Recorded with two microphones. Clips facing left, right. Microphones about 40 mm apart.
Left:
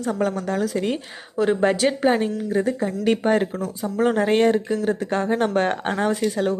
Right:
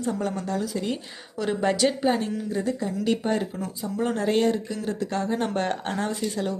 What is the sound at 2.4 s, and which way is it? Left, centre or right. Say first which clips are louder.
Speech: left 5 dB; left.